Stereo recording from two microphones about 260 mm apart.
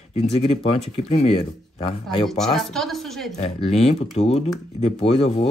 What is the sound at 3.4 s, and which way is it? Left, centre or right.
Speech, left.